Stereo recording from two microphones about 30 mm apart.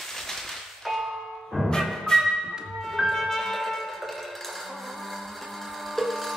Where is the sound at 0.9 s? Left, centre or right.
Centre.